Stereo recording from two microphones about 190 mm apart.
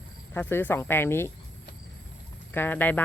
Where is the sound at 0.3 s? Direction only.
10° left (ahead or behind).